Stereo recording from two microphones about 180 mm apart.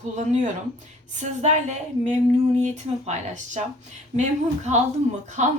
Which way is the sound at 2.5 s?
40° right (ahead or behind).